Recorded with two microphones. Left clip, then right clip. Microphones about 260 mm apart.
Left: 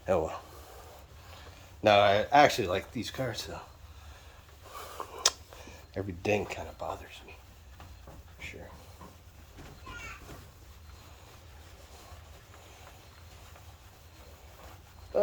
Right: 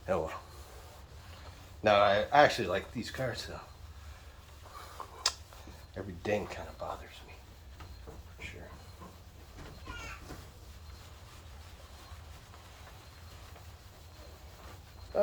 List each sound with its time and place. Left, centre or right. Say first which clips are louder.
0.1 s speech: left 4 dB; left
1.8 s speech: left 3 dB; left
4.7 s a sound: left 5 dB; left
5.9 s speech: left 4 dB; left